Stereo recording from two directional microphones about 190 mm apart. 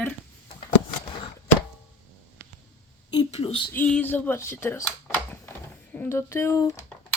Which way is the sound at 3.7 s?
10° left (ahead or behind).